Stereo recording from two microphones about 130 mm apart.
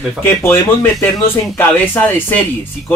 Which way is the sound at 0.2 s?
20° left (ahead or behind).